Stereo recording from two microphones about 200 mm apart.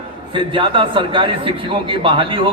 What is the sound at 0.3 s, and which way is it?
A man's voice, 25° right (ahead or behind).